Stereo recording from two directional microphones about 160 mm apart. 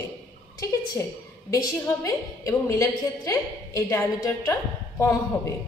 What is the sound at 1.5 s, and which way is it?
A woman's voice, 20° left (ahead or behind).